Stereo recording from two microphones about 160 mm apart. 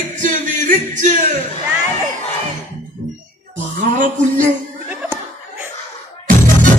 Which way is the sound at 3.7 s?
50° right (ahead or behind).